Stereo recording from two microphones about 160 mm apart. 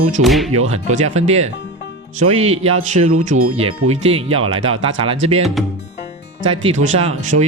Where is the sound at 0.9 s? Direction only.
45° right (ahead or behind).